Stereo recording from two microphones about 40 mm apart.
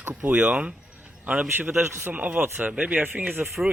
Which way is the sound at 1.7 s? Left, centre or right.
Right.